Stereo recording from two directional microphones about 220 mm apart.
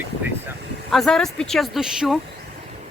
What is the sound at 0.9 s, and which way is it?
A woman's voice, centre (ahead or behind).